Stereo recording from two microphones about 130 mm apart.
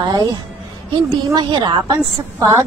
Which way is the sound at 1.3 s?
35° right (ahead or behind).